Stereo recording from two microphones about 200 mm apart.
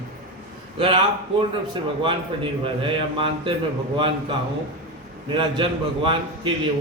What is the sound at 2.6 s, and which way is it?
Speech, 25° right (ahead or behind).